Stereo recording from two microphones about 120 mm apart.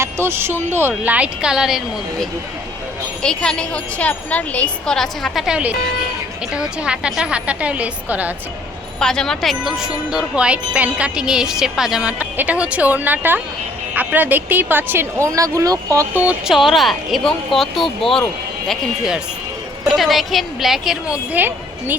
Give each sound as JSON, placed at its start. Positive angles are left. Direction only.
{"t": 0.0, "sound": "wind chime", "side_deg": -20}
{"t": 3.2, "sound": "speech", "side_deg": 5}
{"t": 6.5, "sound": "wind chime", "side_deg": -5}
{"t": 9.0, "sound": "speech", "side_deg": 5}
{"t": 10.1, "sound": "wind chime", "side_deg": -10}
{"t": 16.1, "sound": "speech", "side_deg": -10}
{"t": 21.3, "sound": "a woman's voice", "side_deg": -15}